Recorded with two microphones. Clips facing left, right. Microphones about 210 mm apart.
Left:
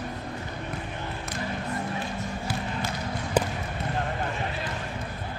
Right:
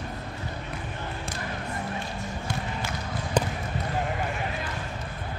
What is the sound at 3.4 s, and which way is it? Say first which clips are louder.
Basketball bounce: left 1 dB; 5° left (ahead or behind).